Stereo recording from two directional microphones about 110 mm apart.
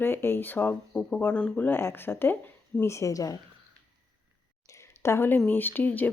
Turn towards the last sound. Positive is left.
turn(degrees=15)  # may be behind; listen again after turning